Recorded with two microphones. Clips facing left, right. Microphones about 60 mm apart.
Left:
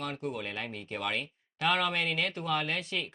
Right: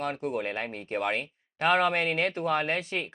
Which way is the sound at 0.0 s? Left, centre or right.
Right.